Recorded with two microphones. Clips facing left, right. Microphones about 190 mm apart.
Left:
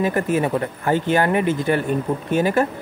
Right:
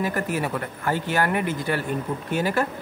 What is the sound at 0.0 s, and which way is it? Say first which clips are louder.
Speech: left 6 dB; 20° left (ahead or behind).